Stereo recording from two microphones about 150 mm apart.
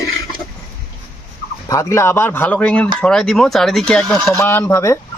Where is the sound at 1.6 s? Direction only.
25° left (ahead or behind); by 4.3 s 5° left (ahead or behind).